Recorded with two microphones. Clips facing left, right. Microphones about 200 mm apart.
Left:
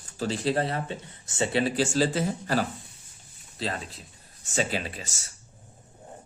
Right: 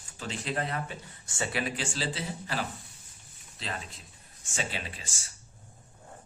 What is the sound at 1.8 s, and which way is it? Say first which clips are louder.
Speech: left 10 dB; 45° left (ahead or behind).